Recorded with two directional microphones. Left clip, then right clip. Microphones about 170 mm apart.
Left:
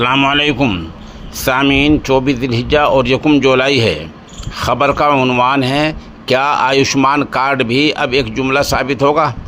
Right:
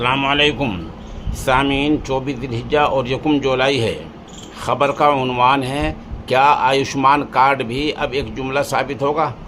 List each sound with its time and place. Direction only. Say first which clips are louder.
0.0 s a man's voice: left 4 dB; 35° left (ahead or behind)